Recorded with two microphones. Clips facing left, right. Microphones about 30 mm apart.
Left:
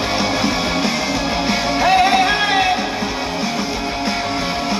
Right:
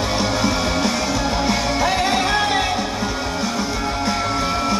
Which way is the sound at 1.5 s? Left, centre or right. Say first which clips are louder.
Left 7 dB; left.